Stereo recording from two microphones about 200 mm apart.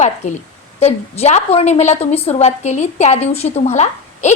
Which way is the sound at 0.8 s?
30° left (ahead or behind).